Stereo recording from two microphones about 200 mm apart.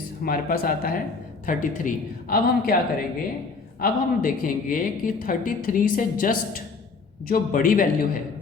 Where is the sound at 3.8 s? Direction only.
45° left (ahead or behind).